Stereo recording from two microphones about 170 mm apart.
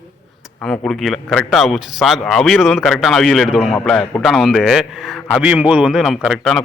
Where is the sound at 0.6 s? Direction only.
Centre (ahead or behind).